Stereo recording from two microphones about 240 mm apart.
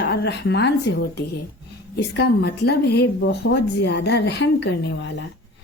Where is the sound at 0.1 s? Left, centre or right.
Left.